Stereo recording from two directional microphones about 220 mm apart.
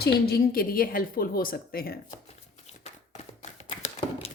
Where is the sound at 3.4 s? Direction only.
30° left (ahead or behind).